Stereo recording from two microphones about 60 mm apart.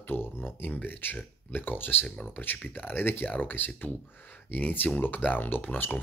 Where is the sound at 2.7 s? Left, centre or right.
Left.